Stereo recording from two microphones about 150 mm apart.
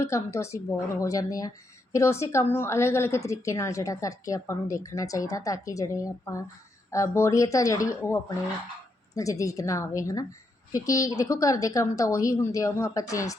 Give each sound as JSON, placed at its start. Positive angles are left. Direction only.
{"t": 0.0, "sound": "speech", "side_deg": 20}